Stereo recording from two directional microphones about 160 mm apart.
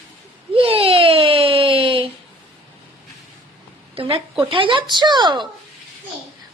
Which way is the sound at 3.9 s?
35° right (ahead or behind).